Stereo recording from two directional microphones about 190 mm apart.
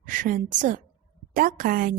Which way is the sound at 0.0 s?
45° right (ahead or behind).